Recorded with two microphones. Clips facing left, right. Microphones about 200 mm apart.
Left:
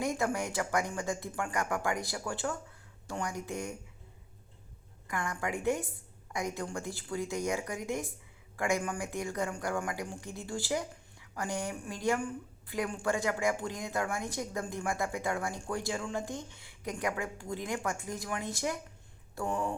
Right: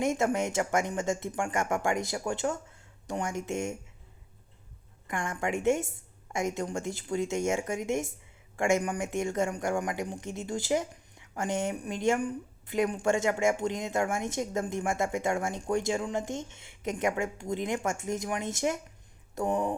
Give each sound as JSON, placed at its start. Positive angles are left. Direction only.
{"t": 0.0, "sound": "a woman's voice", "side_deg": -25}
{"t": 5.0, "sound": "a woman's voice", "side_deg": -25}